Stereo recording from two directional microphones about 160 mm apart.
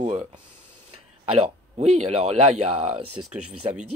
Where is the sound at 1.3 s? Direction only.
40° right (ahead or behind).